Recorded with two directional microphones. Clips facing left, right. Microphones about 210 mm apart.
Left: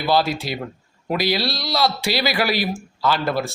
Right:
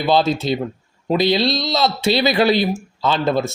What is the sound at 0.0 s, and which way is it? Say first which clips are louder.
A man's voice: right 3 dB; 20° right (ahead or behind).